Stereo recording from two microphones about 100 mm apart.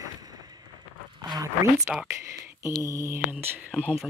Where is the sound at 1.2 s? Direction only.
40° right (ahead or behind).